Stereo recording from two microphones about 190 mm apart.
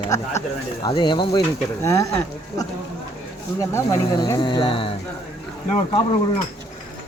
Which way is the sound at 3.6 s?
15° left (ahead or behind).